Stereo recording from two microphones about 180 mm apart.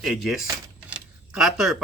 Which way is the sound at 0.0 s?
Centre (ahead or behind).